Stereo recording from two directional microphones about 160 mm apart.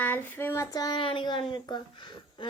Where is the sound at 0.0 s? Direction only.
10° left (ahead or behind).